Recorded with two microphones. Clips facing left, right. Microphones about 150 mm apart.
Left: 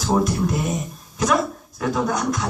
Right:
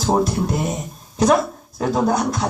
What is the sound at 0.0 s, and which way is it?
Speech, 35° right (ahead or behind).